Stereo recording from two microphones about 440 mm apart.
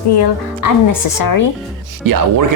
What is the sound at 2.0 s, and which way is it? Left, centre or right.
Speech, right.